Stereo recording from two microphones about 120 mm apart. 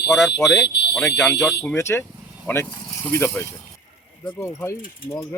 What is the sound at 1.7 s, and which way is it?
A man's voice, 20° left (ahead or behind).